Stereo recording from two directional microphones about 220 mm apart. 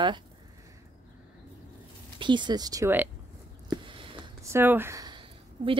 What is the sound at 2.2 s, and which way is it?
Speech, 20° right (ahead or behind).